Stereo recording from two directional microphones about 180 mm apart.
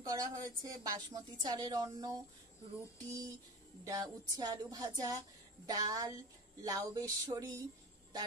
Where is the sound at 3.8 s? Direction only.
20° right (ahead or behind).